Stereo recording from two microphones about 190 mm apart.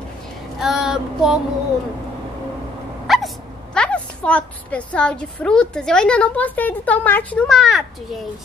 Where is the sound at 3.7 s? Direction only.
5° left (ahead or behind).